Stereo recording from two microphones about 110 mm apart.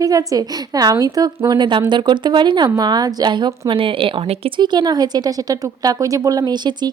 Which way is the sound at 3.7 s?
55° right (ahead or behind).